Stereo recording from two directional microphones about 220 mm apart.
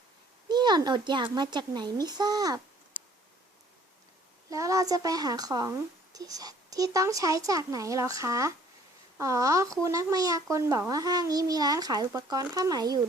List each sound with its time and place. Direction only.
0.4 s a child's voice: 20° right (ahead or behind)
4.4 s a child's voice: 15° right (ahead or behind)